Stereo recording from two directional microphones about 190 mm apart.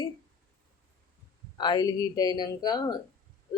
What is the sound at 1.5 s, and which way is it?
Speech, 25° left (ahead or behind).